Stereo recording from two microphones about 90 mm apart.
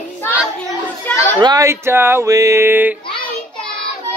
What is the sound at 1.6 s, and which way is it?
Speech, 30° right (ahead or behind).